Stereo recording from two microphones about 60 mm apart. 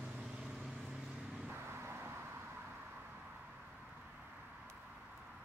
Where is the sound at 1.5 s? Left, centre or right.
Right.